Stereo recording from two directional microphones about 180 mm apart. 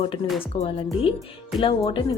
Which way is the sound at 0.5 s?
35° left (ahead or behind).